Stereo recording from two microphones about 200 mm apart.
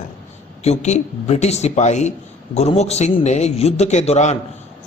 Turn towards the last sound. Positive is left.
turn(degrees=35)  # may be behind; listen again after turning